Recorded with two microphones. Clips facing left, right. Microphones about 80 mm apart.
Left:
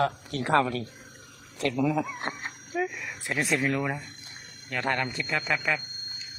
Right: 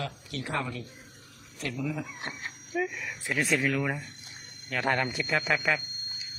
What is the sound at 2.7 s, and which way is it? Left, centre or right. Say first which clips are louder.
Speech: left 1 dB; centre.